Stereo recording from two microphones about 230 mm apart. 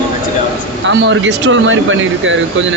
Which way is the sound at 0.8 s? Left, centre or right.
Right.